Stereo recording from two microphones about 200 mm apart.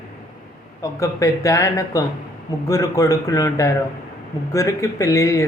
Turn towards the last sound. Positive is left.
turn(degrees=15)  # may be behind; listen again after turning